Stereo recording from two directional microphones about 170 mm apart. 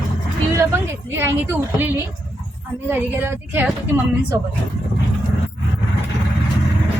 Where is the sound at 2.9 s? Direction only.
10° right (ahead or behind).